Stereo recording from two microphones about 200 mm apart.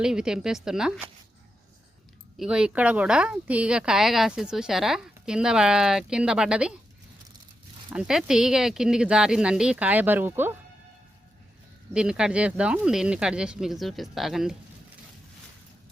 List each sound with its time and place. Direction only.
0.0 s speech: 5° right (ahead or behind)
2.4 s speech: 5° right (ahead or behind)
7.9 s speech: 5° right (ahead or behind)
11.9 s speech: 5° right (ahead or behind)